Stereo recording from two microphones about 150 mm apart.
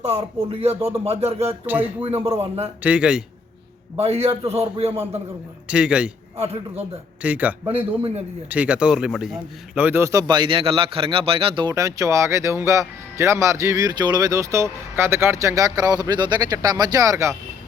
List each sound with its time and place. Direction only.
0.0 s a man's voice: 40° right (ahead or behind)
0.7 s a man's voice: 15° right (ahead or behind)
1.0 s speech: 40° right (ahead or behind)
1.6 s a man's voice: 10° right (ahead or behind)
2.0 s speech: 40° right (ahead or behind)
2.8 s a man's voice: 5° right (ahead or behind)
3.9 s a man's voice: 45° right (ahead or behind)
5.6 s a man's voice: 5° right (ahead or behind)
6.3 s a man's voice: 40° right (ahead or behind)
7.2 s a man's voice: 10° right (ahead or behind); by 11.7 s 35° right (ahead or behind)
11.7 s speech: 20° right (ahead or behind)